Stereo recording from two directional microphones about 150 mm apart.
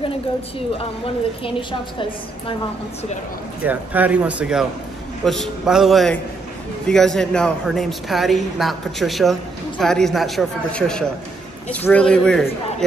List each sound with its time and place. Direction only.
0.7 s a woman's voice: 35° left (ahead or behind)
3.6 s a man's voice: 10° right (ahead or behind); by 12.4 s 5° left (ahead or behind)